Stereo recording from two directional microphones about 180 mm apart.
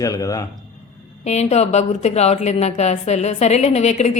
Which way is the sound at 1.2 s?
35° left (ahead or behind).